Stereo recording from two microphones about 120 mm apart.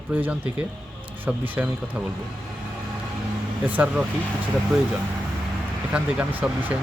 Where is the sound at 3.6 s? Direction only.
15° right (ahead or behind).